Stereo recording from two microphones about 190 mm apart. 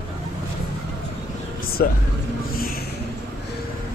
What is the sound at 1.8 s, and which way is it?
Speech, 50° left (ahead or behind).